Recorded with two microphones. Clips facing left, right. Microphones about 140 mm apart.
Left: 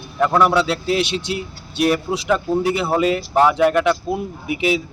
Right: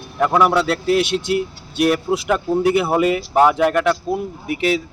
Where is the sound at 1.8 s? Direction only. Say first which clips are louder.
Right 1 dB; centre (ahead or behind).